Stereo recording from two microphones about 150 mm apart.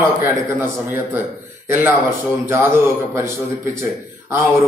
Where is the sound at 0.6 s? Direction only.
15° right (ahead or behind).